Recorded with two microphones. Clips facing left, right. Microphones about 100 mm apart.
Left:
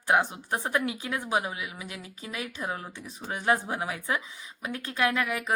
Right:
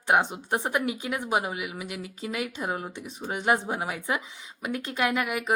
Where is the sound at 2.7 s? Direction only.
20° right (ahead or behind).